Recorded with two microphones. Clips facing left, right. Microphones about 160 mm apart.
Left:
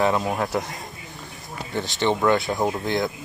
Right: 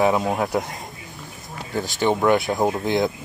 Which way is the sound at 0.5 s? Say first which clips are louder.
Right 2 dB; 20° right (ahead or behind).